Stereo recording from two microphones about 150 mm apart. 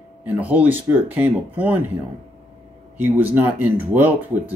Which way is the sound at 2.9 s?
10° right (ahead or behind).